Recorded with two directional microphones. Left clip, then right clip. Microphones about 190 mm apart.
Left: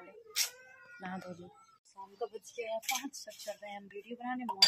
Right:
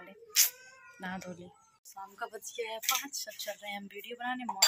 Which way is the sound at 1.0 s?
5° left (ahead or behind).